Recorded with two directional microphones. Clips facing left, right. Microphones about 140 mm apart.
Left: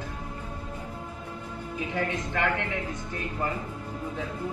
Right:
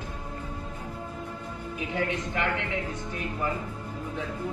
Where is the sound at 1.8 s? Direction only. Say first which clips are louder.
Even; 20° right (ahead or behind).